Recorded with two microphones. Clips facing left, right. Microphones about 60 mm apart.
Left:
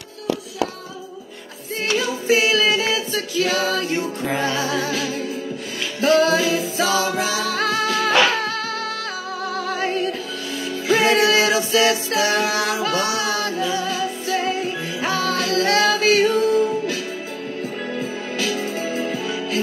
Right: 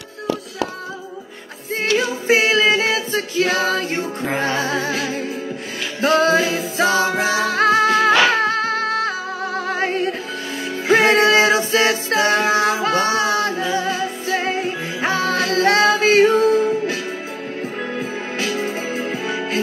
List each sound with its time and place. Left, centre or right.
2.0 s music: right
7.4 s music: right